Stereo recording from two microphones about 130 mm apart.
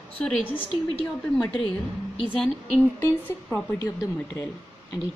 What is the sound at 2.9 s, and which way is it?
Speech, 15° left (ahead or behind).